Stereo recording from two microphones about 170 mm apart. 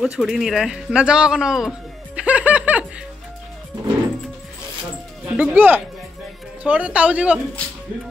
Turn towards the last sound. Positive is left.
turn(degrees=-5)  # may be behind; listen again after turning